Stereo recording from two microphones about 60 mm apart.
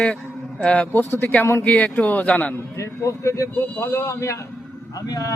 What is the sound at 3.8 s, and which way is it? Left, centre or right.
Speech, left.